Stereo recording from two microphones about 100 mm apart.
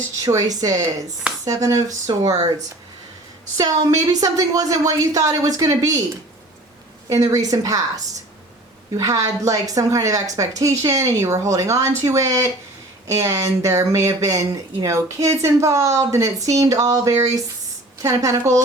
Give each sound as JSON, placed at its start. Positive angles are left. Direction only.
{"t": 0.2, "sound": "speech", "side_deg": -35}
{"t": 3.6, "sound": "speech", "side_deg": -35}
{"t": 7.1, "sound": "speech", "side_deg": -35}